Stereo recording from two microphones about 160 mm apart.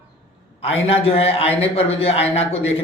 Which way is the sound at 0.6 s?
40° left (ahead or behind).